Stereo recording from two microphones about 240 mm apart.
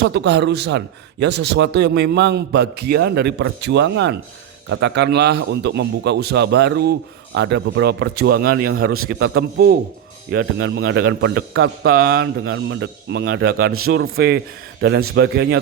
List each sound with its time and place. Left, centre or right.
0.0 s a man's voice: right
13.7 s a man's voice: right
14.2 s a man's voice: right